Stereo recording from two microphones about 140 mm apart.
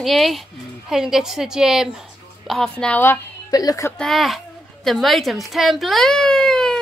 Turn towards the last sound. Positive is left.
turn(degrees=5)  # may be behind; listen again after turning